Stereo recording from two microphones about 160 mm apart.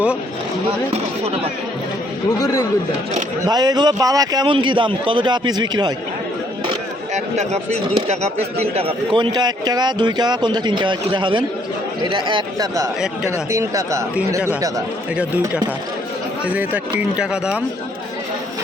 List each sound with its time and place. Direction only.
3.4 s speech: 25° right (ahead or behind)
7.1 s speech: 45° right (ahead or behind); by 14.7 s 20° right (ahead or behind)
15.1 s speech: 5° right (ahead or behind)